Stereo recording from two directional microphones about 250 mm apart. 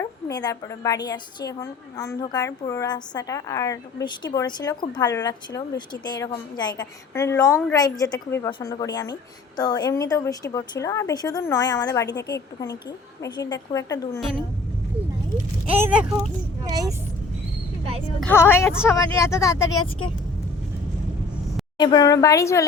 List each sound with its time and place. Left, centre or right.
0.0 s a woman's voice: centre
14.2 s speech: centre
15.6 s speech: centre
18.2 s a woman's voice: centre
21.8 s a woman's voice: centre